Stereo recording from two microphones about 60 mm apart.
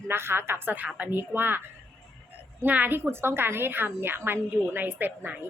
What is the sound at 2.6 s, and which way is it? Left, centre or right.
A woman's voice, right.